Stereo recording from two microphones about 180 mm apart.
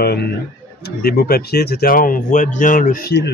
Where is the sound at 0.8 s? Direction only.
60° left (ahead or behind).